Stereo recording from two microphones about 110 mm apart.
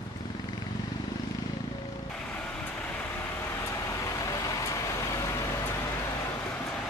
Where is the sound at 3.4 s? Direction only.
25° left (ahead or behind).